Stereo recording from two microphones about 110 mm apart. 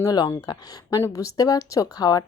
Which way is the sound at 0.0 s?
35° left (ahead or behind).